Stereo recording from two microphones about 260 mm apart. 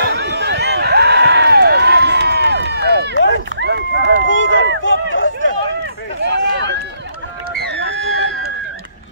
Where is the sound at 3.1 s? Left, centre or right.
Left.